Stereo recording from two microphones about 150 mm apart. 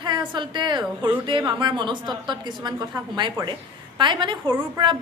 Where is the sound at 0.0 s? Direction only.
30° right (ahead or behind).